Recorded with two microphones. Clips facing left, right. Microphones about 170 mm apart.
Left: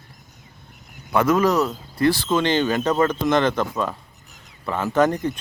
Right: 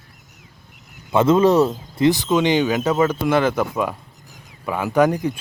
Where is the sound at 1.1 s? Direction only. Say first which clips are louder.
Right 4 dB; 25° right (ahead or behind).